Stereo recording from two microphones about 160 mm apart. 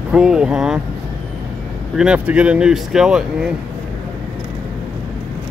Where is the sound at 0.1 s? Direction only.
5° right (ahead or behind).